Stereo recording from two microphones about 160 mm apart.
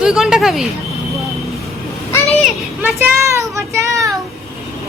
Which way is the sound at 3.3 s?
20° right (ahead or behind).